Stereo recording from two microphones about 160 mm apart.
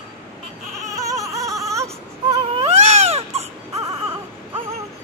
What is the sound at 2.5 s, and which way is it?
Baby cry, 40° right (ahead or behind).